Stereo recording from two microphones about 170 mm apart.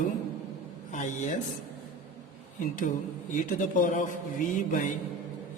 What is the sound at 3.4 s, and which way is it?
Speech, 50° left (ahead or behind).